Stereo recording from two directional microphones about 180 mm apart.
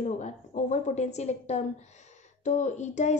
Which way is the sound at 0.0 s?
40° left (ahead or behind).